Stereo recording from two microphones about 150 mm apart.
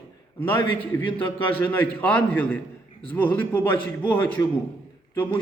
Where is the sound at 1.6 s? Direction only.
15° left (ahead or behind).